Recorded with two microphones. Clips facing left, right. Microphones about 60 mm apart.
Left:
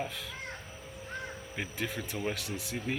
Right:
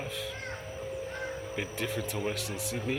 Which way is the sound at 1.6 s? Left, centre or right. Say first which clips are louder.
Right 1 dB; centre.